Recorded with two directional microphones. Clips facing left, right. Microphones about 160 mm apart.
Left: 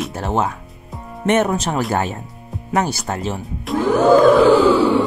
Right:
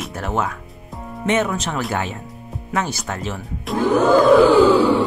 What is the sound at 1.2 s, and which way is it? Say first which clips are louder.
Speech: left 3 dB; 50° left (ahead or behind).